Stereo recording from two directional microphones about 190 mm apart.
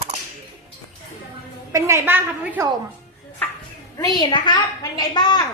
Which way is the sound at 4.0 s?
20° left (ahead or behind).